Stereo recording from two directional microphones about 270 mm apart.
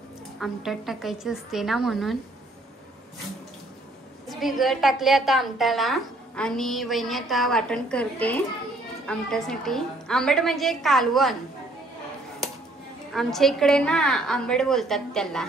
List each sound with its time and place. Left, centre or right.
0.4 s a woman's voice: centre
4.3 s a woman's voice: centre
13.1 s a woman's voice: centre